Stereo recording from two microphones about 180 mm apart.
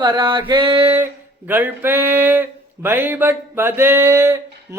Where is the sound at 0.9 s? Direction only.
10° right (ahead or behind).